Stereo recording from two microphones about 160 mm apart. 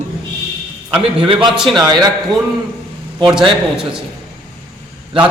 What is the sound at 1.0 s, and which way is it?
Speech, 35° right (ahead or behind).